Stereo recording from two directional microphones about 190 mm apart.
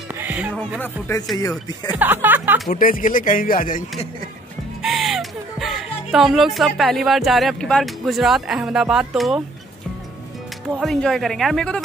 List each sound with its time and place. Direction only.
0.1 s music: 10° right (ahead or behind)
0.7 s speech: 10° left (ahead or behind)
2.0 s speech: 10° right (ahead or behind)
2.7 s speech: 45° left (ahead or behind)
4.8 s speech: centre (ahead or behind)
10.7 s speech: centre (ahead or behind)